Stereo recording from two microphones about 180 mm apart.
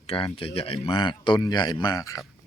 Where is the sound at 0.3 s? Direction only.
30° left (ahead or behind).